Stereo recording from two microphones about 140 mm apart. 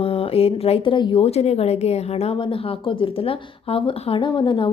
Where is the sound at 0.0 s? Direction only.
40° left (ahead or behind).